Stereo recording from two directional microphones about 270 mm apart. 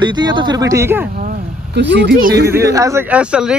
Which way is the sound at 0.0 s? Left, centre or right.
Centre.